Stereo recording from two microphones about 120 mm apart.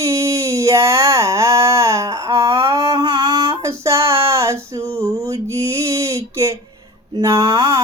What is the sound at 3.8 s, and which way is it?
Female singing, 25° right (ahead or behind).